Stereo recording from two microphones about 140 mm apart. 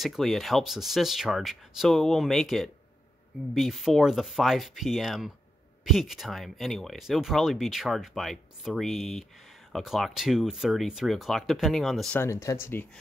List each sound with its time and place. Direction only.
0.0 s speech: centre (ahead or behind)
12.2 s speech: 20° left (ahead or behind)